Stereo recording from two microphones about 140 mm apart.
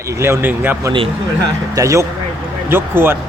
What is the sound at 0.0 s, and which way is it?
Speech, 20° right (ahead or behind).